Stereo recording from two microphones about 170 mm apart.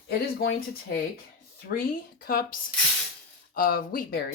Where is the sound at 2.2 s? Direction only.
60° left (ahead or behind).